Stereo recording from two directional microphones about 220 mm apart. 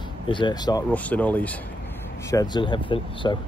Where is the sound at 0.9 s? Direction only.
5° left (ahead or behind); by 3.3 s 20° left (ahead or behind).